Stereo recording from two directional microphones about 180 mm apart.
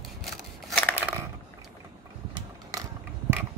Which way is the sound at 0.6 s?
Centre (ahead or behind).